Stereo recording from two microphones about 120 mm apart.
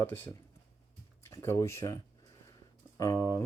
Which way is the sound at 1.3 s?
25° left (ahead or behind).